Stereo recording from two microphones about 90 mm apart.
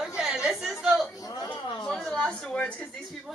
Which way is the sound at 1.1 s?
40° left (ahead or behind).